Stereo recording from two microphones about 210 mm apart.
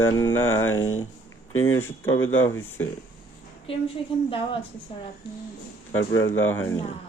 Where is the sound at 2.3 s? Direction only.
10° left (ahead or behind).